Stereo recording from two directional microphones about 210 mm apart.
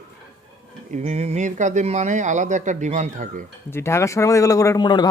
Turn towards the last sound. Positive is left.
turn(degrees=20)  # may be behind; listen again after turning